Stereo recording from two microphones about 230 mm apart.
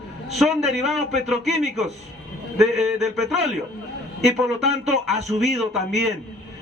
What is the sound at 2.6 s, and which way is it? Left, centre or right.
A man's voice, centre.